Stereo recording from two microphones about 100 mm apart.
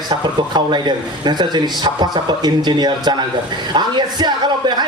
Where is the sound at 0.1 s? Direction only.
50° right (ahead or behind).